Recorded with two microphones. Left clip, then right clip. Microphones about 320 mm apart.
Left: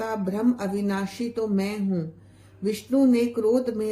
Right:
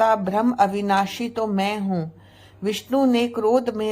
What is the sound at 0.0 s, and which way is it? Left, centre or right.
Speech, centre.